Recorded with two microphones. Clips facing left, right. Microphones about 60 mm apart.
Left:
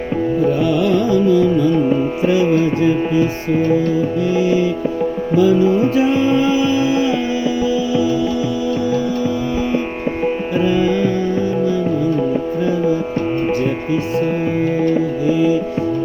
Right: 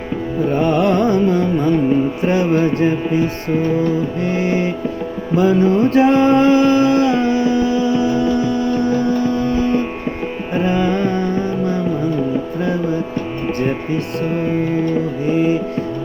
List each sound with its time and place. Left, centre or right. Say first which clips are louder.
0.5 s carnatic music: even; right
2.2 s music: left 3 dB; right
9.5 s music: right 2 dB; centre
10.5 s music: even; right
15.3 s music: left 1 dB; right